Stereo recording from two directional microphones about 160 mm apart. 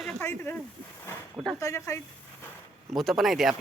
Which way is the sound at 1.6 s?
20° left (ahead or behind).